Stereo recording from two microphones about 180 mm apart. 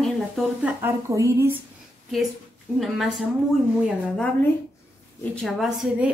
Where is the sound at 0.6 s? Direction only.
15° right (ahead or behind).